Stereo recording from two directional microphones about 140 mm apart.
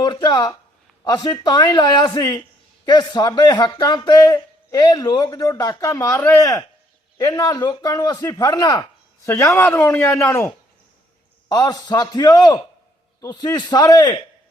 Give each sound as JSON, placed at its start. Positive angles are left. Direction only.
{"t": 0.0, "sound": "speech", "side_deg": 30}